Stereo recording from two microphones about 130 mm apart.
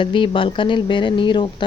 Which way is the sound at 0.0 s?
40° left (ahead or behind).